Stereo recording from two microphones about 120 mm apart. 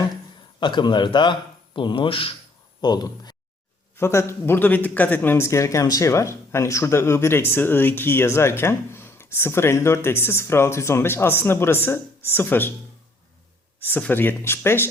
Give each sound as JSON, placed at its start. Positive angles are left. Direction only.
{"t": 0.6, "sound": "speech", "side_deg": 40}
{"t": 2.8, "sound": "speech", "side_deg": 35}
{"t": 3.9, "sound": "speech", "side_deg": 20}
{"t": 13.8, "sound": "speech", "side_deg": 15}